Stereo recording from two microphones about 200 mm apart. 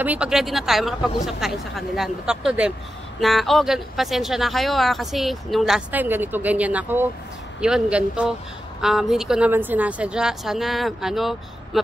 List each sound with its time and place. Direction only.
0.0 s speech: 5° right (ahead or behind)